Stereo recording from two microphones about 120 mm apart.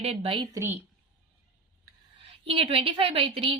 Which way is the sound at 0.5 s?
20° right (ahead or behind).